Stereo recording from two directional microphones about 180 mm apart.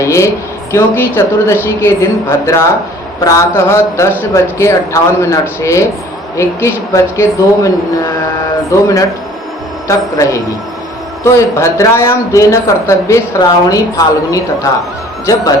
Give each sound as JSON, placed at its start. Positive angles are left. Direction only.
{"t": 0.0, "sound": "speech", "side_deg": 15}
{"t": 9.8, "sound": "speech", "side_deg": 15}